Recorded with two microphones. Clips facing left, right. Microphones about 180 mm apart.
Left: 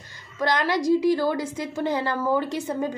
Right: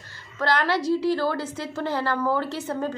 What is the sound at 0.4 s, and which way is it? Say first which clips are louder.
A woman's voice: even; 15° left (ahead or behind).